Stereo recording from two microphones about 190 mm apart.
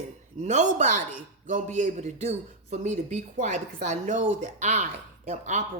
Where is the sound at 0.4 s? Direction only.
40° right (ahead or behind).